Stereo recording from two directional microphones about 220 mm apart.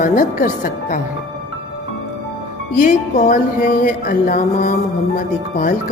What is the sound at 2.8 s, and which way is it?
Music, 35° left (ahead or behind).